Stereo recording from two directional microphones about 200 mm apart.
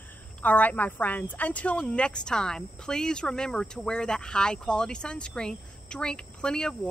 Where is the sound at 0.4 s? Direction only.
10° left (ahead or behind).